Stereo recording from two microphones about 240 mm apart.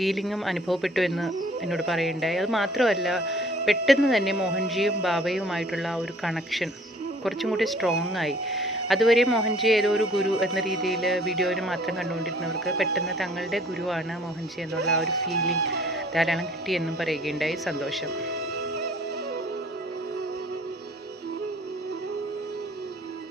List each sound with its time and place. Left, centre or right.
0.0 s speech: centre
15.6 s speech: right
16.1 s speech: centre